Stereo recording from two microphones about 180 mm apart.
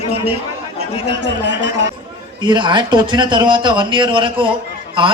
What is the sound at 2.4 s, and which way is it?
A man's voice, 25° right (ahead or behind).